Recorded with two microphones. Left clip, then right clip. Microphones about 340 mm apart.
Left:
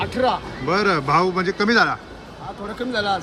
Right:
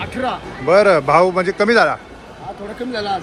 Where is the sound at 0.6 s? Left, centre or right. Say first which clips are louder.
Right 8 dB; centre.